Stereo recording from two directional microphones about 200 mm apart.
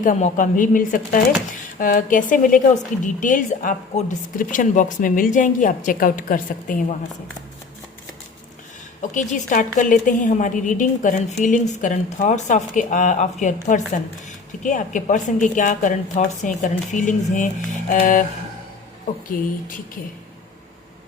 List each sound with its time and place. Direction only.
0.0 s a woman's voice: 40° left (ahead or behind)
9.0 s a woman's voice: 40° left (ahead or behind)